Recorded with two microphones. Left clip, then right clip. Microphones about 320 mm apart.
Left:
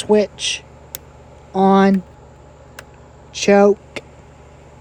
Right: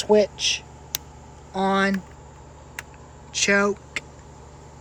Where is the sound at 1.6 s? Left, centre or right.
Centre.